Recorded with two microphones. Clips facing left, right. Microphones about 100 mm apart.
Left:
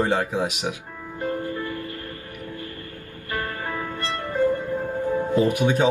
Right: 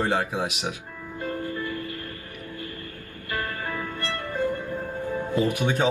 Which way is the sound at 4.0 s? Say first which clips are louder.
Left 6 dB; 20° left (ahead or behind).